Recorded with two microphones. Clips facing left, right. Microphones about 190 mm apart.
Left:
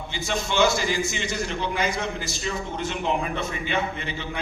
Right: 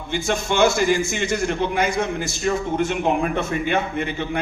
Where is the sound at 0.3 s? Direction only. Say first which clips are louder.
Right 3 dB; 55° right (ahead or behind).